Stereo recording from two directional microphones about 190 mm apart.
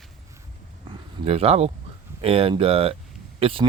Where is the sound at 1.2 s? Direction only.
30° right (ahead or behind).